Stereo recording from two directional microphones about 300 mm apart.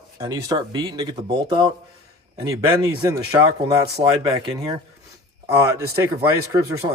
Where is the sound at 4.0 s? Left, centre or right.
Right.